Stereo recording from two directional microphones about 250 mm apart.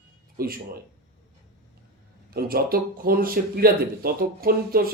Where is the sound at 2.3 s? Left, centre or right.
Right.